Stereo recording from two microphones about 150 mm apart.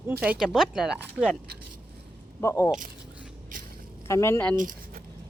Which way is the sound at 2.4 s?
20° left (ahead or behind).